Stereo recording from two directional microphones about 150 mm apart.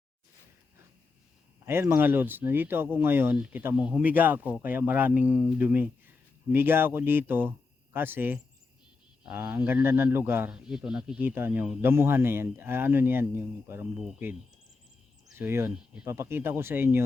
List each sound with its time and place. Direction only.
1.6 s speech: 15° right (ahead or behind)
10.5 s speech: 5° right (ahead or behind)
15.4 s speech: 15° right (ahead or behind)